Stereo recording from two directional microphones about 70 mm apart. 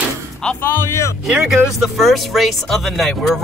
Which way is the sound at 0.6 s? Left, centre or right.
Left.